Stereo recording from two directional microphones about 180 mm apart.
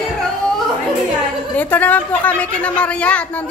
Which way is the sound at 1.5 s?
10° left (ahead or behind).